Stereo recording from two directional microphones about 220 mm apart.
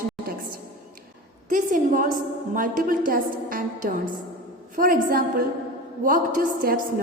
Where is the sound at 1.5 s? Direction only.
35° right (ahead or behind).